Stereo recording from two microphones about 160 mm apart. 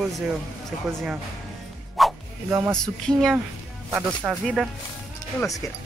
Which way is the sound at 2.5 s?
15° right (ahead or behind).